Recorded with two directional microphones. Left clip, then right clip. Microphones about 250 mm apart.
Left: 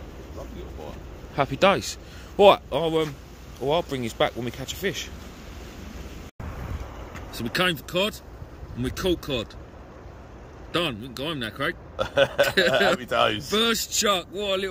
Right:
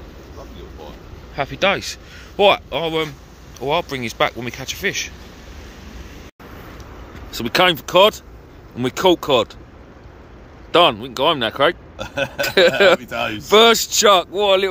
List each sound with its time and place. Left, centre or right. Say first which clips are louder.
1.3 s a man's voice: right 2 dB; left; by 5.1 s centre
7.2 s a man's voice: right 9 dB; centre
10.7 s a man's voice: right 13 dB; centre
12.0 s a man's voice: left 5 dB; centre
12.5 s a man's voice: right 12 dB; centre